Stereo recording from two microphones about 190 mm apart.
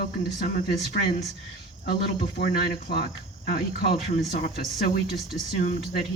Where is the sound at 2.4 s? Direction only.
55° left (ahead or behind).